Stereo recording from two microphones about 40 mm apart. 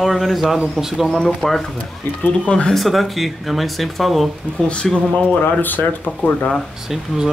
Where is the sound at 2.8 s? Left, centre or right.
Centre.